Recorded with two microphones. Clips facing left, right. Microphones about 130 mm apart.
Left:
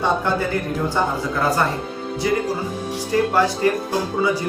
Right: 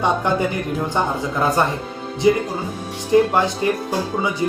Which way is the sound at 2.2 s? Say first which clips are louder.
Right 4 dB; 20° right (ahead or behind).